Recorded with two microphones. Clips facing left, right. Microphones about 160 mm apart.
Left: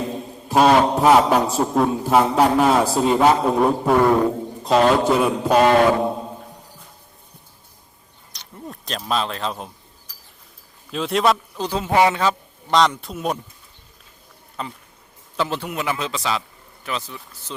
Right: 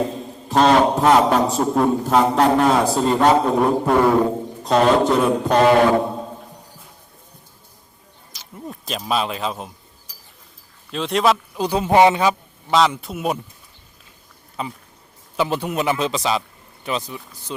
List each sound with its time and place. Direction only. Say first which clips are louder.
0.4 s a man's voice: even; 10° left (ahead or behind)
8.3 s a sound: right 2 dB; 5° right (ahead or behind)
10.9 s a man's voice: right 1 dB; centre (ahead or behind)
11.5 s a man's voice: right 3 dB; 15° right (ahead or behind)
14.6 s a man's voice: right 2 dB; 5° right (ahead or behind)